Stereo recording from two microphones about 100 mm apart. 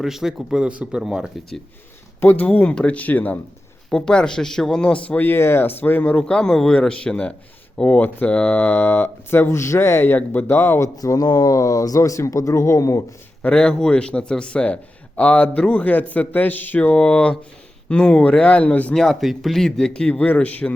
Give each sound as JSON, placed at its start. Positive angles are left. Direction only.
{"t": 0.0, "sound": "speech", "side_deg": -5}
{"t": 2.2, "sound": "a man's voice", "side_deg": 15}
{"t": 5.0, "sound": "a man's voice", "side_deg": 15}
{"t": 13.4, "sound": "a man's voice", "side_deg": 10}
{"t": 19.0, "sound": "a man's voice", "side_deg": 0}